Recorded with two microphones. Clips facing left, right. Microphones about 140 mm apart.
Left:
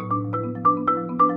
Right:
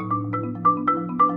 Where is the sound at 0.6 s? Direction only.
Centre (ahead or behind).